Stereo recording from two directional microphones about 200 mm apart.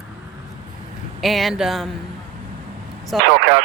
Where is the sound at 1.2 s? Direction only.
Centre (ahead or behind).